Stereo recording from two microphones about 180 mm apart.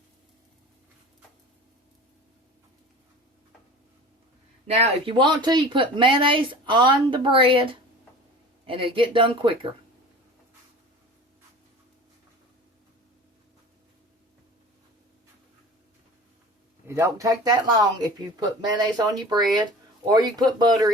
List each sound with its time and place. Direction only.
4.6 s speech: 35° right (ahead or behind)
16.8 s speech: 15° right (ahead or behind)